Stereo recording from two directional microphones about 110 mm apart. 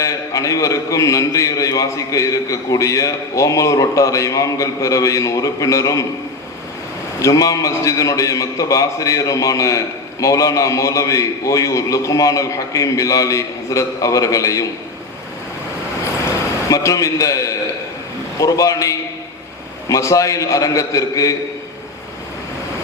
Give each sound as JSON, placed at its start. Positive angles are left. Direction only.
{"t": 0.0, "sound": "a man's voice", "side_deg": 30}
{"t": 7.2, "sound": "a man's voice", "side_deg": 30}
{"t": 16.2, "sound": "a sound", "side_deg": 30}
{"t": 18.3, "sound": "a man's voice", "side_deg": 30}